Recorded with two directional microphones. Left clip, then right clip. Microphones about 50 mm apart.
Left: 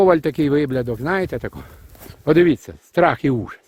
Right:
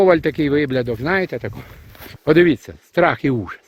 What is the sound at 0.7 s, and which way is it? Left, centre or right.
Speech, centre.